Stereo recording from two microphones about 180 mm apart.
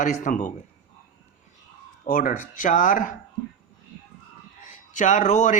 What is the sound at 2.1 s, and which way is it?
Speech, 50° left (ahead or behind).